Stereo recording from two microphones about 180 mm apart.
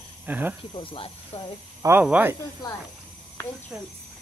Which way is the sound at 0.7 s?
30° left (ahead or behind).